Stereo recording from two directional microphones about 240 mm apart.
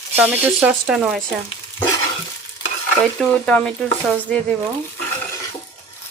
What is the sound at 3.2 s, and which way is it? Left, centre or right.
Speech, centre.